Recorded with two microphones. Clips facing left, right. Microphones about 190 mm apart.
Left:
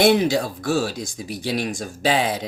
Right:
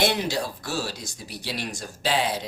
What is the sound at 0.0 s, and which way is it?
Speech, 50° left (ahead or behind).